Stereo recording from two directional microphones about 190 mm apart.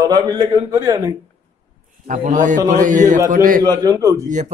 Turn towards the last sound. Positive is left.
turn(degrees=-20)  # may be behind; listen again after turning